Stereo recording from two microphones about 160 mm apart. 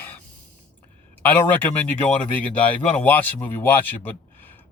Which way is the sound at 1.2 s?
10° left (ahead or behind).